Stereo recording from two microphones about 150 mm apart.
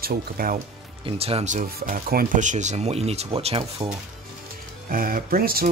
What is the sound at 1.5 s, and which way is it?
Speech, 70° right (ahead or behind).